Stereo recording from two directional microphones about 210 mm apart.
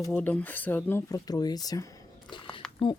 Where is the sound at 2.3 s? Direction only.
25° left (ahead or behind).